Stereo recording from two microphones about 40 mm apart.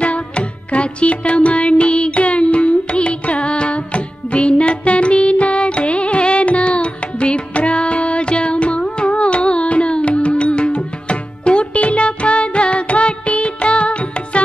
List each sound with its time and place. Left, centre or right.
0.0 s music: left